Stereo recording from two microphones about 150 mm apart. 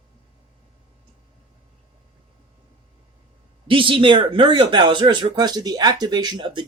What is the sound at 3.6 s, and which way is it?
Speech, 35° right (ahead or behind).